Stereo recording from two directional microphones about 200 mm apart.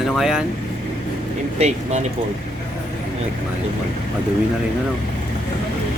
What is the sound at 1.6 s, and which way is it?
Speech, 35° right (ahead or behind).